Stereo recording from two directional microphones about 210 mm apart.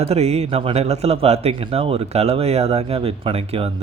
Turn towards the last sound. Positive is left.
turn(degrees=-30)  # may be behind; listen again after turning